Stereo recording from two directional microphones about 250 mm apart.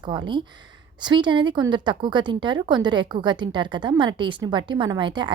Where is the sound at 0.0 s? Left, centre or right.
Centre.